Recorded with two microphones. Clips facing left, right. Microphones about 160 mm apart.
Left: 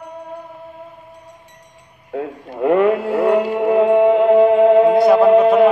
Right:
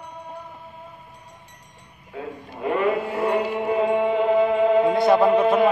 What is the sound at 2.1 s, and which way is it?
Music, 65° left (ahead or behind).